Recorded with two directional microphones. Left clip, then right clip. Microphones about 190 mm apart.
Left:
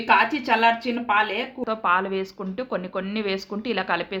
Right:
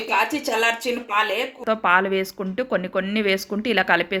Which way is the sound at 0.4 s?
40° right (ahead or behind).